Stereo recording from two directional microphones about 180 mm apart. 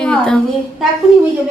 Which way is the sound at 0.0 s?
5° left (ahead or behind).